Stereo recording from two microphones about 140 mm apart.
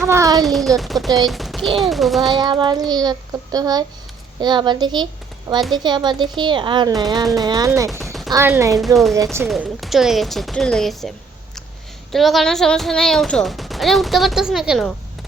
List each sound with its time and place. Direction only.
0.0 s a child's voice: 20° right (ahead or behind)
0.4 s speech: centre (ahead or behind)
2.4 s a child's voice: 35° right (ahead or behind)
8.7 s speech: centre (ahead or behind)
12.1 s speech: centre (ahead or behind)